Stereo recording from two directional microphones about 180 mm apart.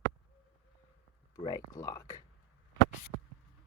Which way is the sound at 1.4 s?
20° left (ahead or behind).